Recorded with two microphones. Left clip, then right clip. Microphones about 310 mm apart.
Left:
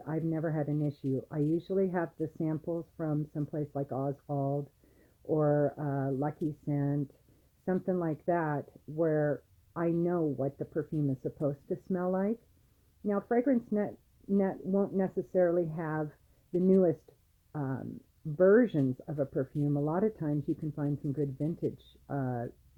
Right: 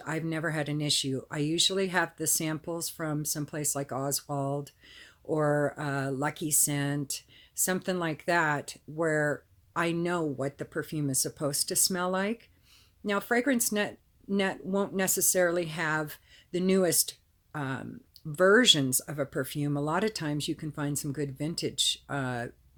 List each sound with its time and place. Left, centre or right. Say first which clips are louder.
0.0 s speech: right 2 dB; right